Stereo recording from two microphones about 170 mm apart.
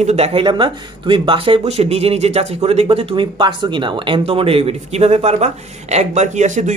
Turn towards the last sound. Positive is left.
turn(degrees=-45)  # may be behind; listen again after turning